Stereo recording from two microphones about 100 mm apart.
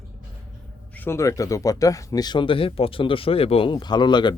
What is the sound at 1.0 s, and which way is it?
Speech, 30° left (ahead or behind).